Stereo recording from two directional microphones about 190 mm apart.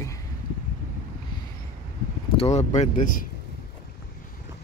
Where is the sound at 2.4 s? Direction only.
35° left (ahead or behind).